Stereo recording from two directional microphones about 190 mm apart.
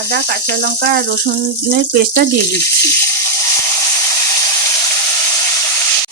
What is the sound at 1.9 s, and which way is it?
Speech, 50° right (ahead or behind).